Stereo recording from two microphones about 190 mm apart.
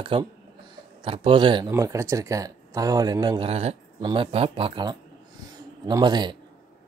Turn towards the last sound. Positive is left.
turn(degrees=-20)  # may be behind; listen again after turning